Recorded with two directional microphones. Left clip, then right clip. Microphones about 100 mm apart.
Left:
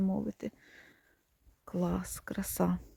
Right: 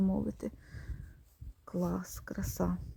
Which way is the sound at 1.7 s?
15° left (ahead or behind).